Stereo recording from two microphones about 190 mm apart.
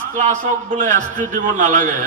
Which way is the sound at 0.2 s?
40° right (ahead or behind).